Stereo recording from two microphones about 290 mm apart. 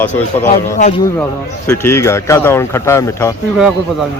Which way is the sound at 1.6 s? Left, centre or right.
Centre.